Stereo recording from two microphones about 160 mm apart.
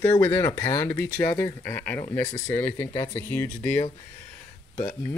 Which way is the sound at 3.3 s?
10° left (ahead or behind).